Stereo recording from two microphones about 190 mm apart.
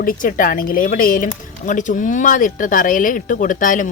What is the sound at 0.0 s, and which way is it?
Speech, 50° left (ahead or behind).